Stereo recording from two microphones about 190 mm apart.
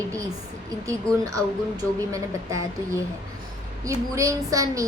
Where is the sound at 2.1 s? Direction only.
15° right (ahead or behind).